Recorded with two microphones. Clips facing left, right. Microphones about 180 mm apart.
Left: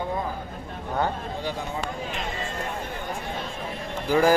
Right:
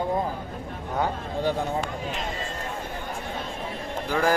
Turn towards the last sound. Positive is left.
turn(degrees=5)  # may be behind; listen again after turning